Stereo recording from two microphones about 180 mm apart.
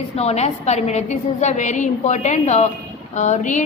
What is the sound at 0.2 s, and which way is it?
A woman's voice, 35° left (ahead or behind).